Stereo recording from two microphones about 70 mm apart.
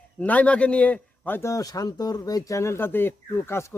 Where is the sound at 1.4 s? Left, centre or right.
Left.